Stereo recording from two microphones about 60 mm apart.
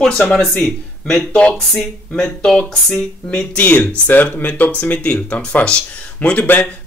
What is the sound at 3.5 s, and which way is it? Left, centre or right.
Speech, left.